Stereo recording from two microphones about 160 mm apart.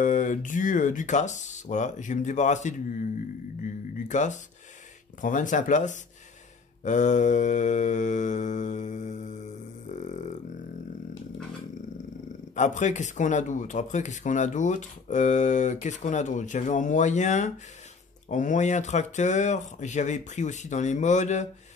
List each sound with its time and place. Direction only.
0.0 s speech: 55° left (ahead or behind)
4.1 s speech: 50° left (ahead or behind)
6.8 s mantra: 50° left (ahead or behind)
12.5 s speech: 50° left (ahead or behind)